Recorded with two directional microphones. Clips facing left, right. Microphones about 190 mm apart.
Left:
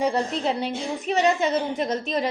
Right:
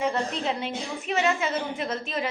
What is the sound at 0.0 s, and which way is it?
A woman's voice, 35° left (ahead or behind).